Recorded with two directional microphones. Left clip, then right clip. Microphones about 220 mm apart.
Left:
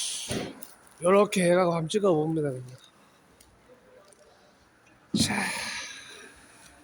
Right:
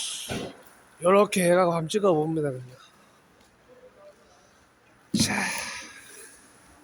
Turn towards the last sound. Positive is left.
turn(degrees=10)  # may be behind; listen again after turning